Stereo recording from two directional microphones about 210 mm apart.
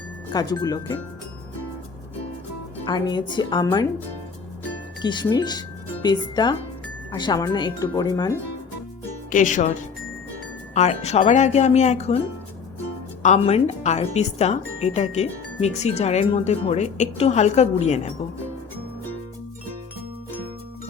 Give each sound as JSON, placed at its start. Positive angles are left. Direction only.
{"t": 0.3, "sound": "speech", "side_deg": 20}
{"t": 2.8, "sound": "speech", "side_deg": 20}
{"t": 5.0, "sound": "speech", "side_deg": 20}
{"t": 9.0, "sound": "speech", "side_deg": 35}
{"t": 13.2, "sound": "speech", "side_deg": 30}